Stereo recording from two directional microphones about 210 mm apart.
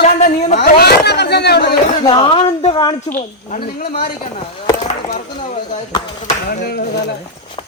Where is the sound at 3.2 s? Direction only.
40° left (ahead or behind).